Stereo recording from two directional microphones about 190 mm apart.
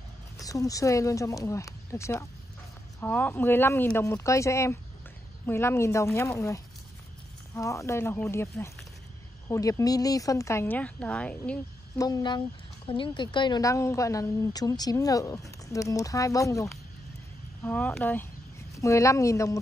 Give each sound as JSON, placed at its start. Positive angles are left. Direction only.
{"t": 0.4, "sound": "speech", "side_deg": 20}
{"t": 12.0, "sound": "speech", "side_deg": 20}
{"t": 17.6, "sound": "speech", "side_deg": 10}